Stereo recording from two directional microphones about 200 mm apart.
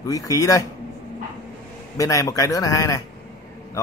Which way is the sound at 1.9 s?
15° left (ahead or behind).